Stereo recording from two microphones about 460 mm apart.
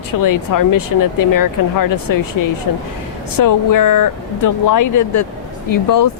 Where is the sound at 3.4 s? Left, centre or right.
Left.